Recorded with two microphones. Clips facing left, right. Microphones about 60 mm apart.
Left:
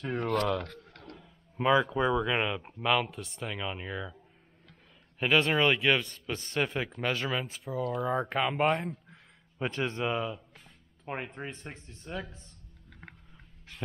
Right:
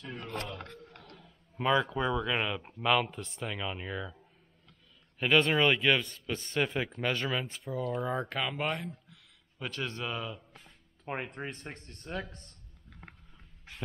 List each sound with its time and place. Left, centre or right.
0.0 s speech: left
0.3 s speech: left
1.1 s speech: centre
5.2 s speech: centre
8.3 s a man's voice: centre
11.2 s speech: centre